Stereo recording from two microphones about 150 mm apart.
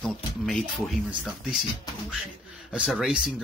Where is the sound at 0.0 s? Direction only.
Centre (ahead or behind).